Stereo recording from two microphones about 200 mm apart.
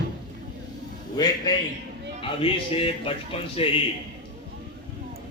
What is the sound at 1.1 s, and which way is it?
Speech, 20° left (ahead or behind).